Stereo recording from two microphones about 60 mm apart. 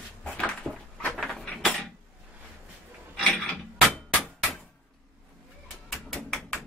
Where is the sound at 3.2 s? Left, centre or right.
Centre.